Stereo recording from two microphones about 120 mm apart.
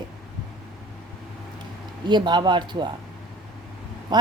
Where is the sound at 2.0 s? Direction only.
40° right (ahead or behind).